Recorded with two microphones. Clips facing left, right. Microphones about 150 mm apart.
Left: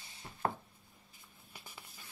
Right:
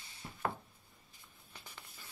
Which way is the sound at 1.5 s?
10° left (ahead or behind).